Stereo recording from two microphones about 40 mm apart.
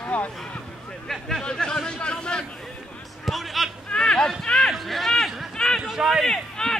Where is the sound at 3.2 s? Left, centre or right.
Centre.